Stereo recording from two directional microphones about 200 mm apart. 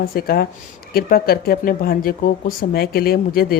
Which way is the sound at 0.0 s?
50° left (ahead or behind).